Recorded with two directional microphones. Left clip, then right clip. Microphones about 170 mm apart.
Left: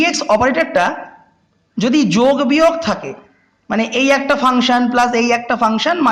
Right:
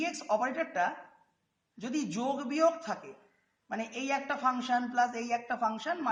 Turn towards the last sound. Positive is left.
turn(degrees=30)  # may be behind; listen again after turning